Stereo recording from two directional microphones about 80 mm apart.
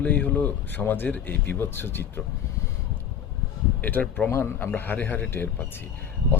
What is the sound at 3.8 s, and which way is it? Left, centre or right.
Speech, left.